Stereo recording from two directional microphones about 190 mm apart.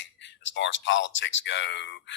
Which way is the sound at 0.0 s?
70° left (ahead or behind).